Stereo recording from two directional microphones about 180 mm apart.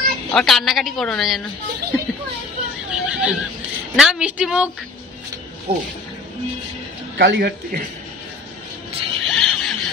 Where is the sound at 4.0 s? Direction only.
5° right (ahead or behind).